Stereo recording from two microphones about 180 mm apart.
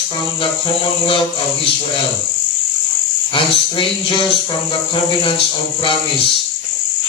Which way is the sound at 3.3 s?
30° left (ahead or behind).